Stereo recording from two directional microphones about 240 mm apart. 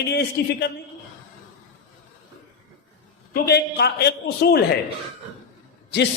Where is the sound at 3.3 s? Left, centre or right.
Left.